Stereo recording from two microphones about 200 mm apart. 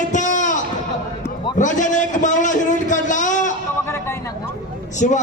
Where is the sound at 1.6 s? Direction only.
40° left (ahead or behind).